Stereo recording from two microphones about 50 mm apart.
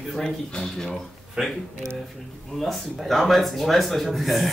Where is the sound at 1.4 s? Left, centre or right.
Centre.